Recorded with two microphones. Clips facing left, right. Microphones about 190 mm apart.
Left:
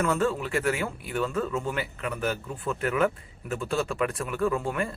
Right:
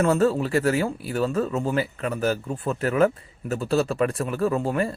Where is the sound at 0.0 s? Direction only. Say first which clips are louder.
Right 6 dB; 35° right (ahead or behind).